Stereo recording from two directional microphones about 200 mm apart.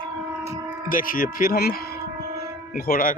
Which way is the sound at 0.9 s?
45° left (ahead or behind).